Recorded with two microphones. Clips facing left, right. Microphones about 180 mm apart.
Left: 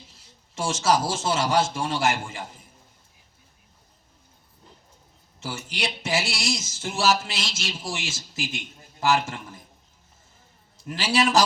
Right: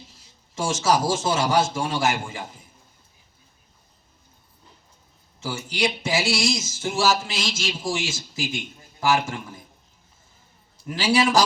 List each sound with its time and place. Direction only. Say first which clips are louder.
0.5 s speech: right 1 dB; 10° right (ahead or behind)
5.5 s speech: right 6 dB; 10° right (ahead or behind)
10.8 s speech: right 3 dB; 10° right (ahead or behind)